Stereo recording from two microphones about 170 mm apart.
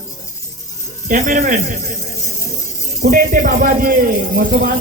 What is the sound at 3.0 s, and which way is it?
Speech, 60° right (ahead or behind).